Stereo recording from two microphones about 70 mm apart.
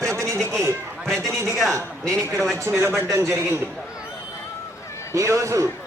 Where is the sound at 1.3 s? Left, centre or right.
Right.